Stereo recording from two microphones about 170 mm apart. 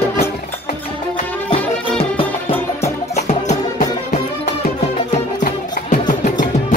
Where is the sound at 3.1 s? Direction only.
45° left (ahead or behind).